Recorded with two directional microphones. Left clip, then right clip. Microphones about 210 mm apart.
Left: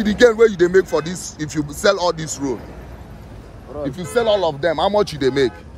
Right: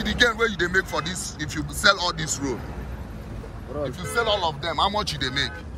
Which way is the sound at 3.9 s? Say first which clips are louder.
Left 7 dB; 50° left (ahead or behind).